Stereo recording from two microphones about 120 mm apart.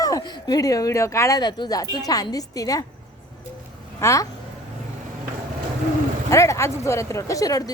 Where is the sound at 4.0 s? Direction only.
25° left (ahead or behind).